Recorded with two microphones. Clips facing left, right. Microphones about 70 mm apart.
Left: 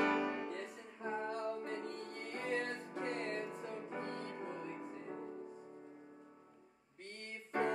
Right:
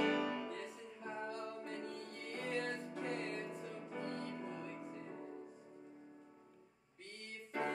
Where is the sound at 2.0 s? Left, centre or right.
Left.